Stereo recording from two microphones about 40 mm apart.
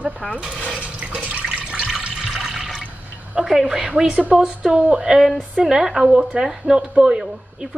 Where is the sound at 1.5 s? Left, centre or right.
Right.